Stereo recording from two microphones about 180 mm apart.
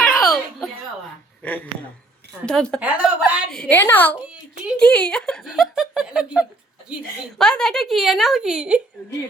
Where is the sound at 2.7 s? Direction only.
5° right (ahead or behind).